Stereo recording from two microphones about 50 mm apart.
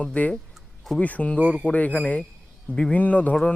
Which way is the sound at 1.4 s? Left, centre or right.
Right.